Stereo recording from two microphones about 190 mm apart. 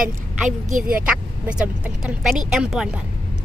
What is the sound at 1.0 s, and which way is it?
Speech, 5° right (ahead or behind).